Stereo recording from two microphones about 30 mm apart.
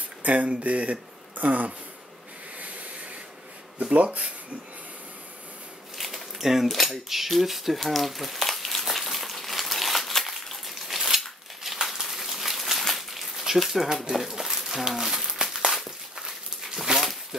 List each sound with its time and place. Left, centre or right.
0.2 s speech: right
1.3 s speech: right
3.9 s speech: right
5.9 s a sound: centre
6.7 s speech: centre
8.9 s a sound: centre
13.6 s speech: centre
14.5 s a sound: centre
16.2 s dog: centre